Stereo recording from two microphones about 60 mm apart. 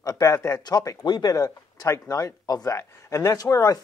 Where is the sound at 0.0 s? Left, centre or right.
Left.